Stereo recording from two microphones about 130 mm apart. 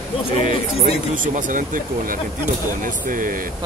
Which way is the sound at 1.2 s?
90° right.